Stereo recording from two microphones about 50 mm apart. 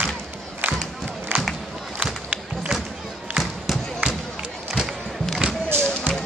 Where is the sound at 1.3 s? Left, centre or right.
Right.